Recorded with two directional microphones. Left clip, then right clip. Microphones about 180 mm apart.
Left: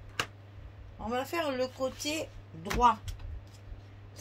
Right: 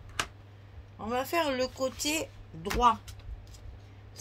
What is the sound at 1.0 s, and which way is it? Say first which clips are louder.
A woman's voice: right 3 dB; 45° right (ahead or behind).